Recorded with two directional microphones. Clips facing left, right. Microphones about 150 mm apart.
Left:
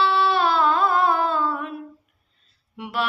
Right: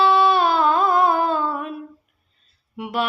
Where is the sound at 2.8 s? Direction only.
15° right (ahead or behind).